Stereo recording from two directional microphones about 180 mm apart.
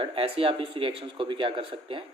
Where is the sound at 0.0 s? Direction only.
30° right (ahead or behind).